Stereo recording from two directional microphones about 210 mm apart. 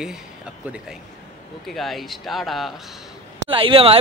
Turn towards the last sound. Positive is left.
turn(degrees=-25)  # may be behind; listen again after turning